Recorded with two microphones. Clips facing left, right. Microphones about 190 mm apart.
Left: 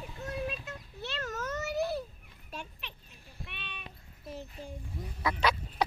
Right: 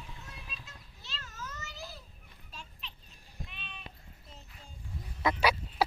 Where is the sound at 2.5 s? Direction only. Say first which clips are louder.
Left 7 dB; 65° left (ahead or behind).